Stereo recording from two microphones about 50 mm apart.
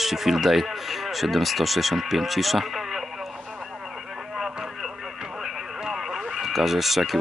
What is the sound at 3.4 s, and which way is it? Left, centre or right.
Radio, centre.